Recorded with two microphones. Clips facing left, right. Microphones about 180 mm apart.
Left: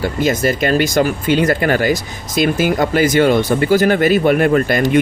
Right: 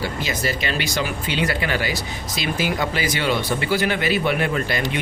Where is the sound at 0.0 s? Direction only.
50° left (ahead or behind).